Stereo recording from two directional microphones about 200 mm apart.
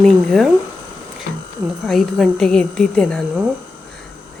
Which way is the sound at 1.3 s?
55° left (ahead or behind).